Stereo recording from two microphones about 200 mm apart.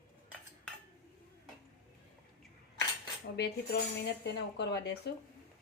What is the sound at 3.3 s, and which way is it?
Speech, 55° left (ahead or behind).